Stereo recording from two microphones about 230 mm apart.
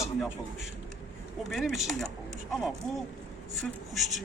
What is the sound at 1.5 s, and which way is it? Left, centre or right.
Speech, centre.